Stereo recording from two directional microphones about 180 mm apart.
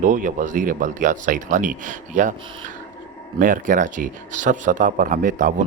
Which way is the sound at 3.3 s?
45° right (ahead or behind).